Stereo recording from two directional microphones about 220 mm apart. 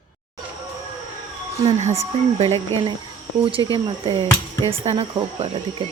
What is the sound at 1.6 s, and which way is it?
Speech, 25° right (ahead or behind).